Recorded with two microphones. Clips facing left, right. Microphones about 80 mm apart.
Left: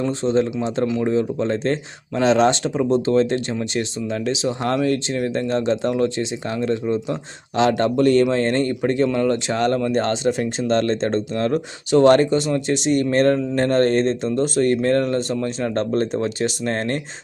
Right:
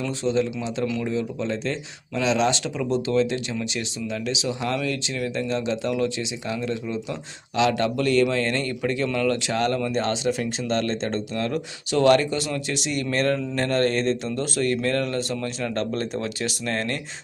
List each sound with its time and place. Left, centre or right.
0.0 s speech: left